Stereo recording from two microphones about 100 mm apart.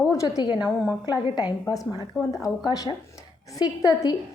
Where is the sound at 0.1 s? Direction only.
35° left (ahead or behind).